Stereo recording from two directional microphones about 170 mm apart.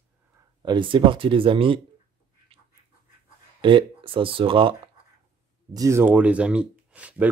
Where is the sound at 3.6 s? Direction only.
30° right (ahead or behind).